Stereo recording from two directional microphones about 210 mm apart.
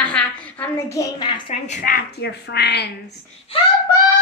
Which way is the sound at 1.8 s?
45° left (ahead or behind).